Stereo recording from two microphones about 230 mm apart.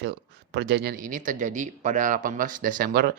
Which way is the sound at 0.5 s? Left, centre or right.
Right.